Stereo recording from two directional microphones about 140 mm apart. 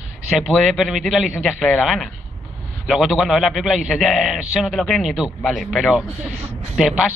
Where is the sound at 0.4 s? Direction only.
Centre (ahead or behind).